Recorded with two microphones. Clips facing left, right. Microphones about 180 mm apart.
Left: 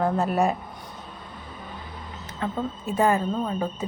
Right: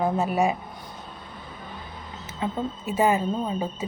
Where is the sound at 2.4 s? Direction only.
15° right (ahead or behind).